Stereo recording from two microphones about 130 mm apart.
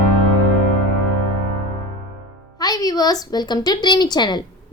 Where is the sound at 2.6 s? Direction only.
30° left (ahead or behind).